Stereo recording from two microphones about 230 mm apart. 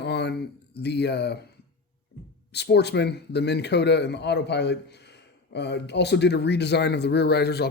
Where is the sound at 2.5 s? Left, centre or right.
Left.